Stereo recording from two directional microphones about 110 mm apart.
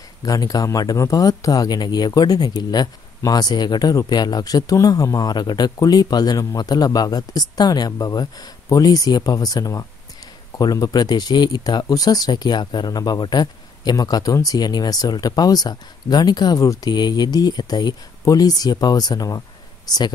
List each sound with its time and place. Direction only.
0.2 s speech: 35° left (ahead or behind)